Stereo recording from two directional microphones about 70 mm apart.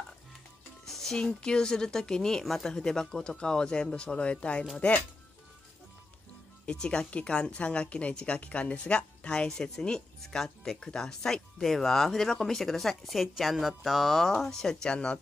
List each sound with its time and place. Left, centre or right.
0.8 s speech: centre; by 5.0 s left
6.6 s speech: centre